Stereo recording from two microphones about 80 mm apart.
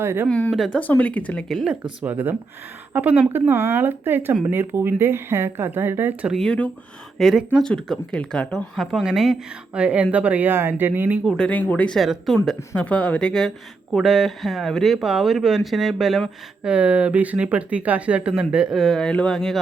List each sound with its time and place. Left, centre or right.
0.0 s speech: right
0.7 s a woman's voice: centre
1.6 s speech: centre; by 6.1 s right
7.2 s a woman's voice: centre
9.7 s speech: centre
11.3 s a woman's voice: centre
11.9 s speech: centre
12.7 s a woman's voice: centre
13.9 s speech: centre
16.6 s speech: centre
18.8 s a woman's voice: centre